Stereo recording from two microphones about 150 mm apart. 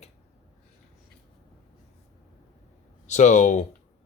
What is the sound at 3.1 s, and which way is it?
Speech, 50° left (ahead or behind).